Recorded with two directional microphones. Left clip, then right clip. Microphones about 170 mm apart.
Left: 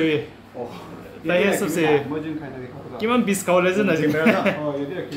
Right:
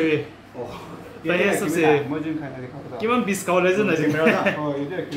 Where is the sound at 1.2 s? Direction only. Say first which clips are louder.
Left 1 dB; 35° left (ahead or behind).